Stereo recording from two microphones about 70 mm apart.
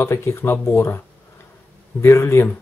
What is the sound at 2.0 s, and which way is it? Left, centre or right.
Speech, left.